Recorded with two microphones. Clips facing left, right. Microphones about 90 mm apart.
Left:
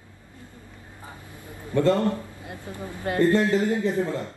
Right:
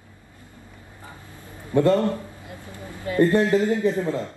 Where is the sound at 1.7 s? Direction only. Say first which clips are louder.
Right 3 dB; 20° right (ahead or behind).